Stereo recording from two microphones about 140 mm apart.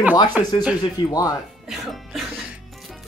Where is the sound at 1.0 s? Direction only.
30° left (ahead or behind).